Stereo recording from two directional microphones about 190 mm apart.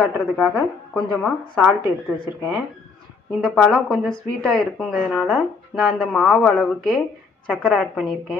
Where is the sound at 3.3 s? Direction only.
Centre (ahead or behind).